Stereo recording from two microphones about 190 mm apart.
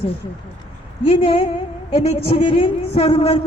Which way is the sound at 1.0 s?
30° left (ahead or behind).